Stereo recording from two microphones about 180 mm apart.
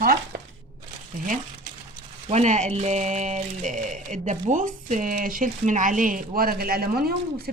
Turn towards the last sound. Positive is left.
turn(degrees=-60)  # may be behind; listen again after turning